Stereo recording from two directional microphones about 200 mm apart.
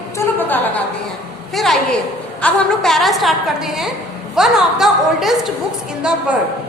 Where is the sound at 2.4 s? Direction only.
5° left (ahead or behind).